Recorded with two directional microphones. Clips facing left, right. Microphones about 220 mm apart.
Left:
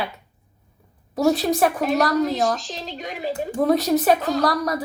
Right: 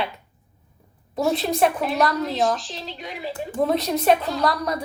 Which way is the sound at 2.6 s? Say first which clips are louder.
Left 3 dB; 40° left (ahead or behind).